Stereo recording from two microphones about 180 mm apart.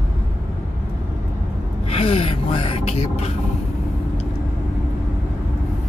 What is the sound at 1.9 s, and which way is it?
Gasp, 35° left (ahead or behind).